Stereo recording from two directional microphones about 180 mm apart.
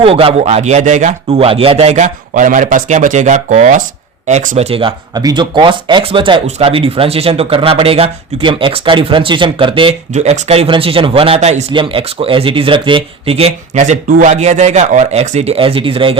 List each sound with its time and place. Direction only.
0.0 s speech: 30° right (ahead or behind)
10.1 s a man's voice: 40° right (ahead or behind)